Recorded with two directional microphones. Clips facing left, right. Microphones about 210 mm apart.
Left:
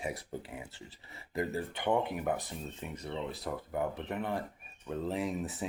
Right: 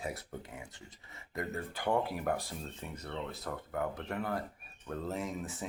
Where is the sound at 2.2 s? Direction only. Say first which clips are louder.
Left 1 dB; 10° left (ahead or behind).